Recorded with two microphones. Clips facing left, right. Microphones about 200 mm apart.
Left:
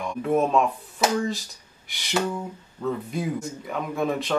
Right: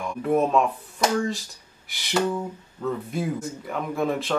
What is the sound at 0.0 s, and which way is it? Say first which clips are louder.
Speech: even; centre (ahead or behind).